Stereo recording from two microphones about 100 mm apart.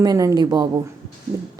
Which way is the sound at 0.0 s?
35° right (ahead or behind).